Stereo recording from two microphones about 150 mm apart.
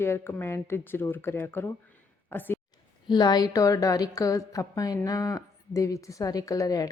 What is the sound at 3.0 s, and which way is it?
A woman's voice, 30° left (ahead or behind).